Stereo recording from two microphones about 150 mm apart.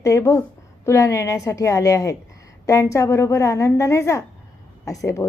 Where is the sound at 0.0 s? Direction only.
20° left (ahead or behind).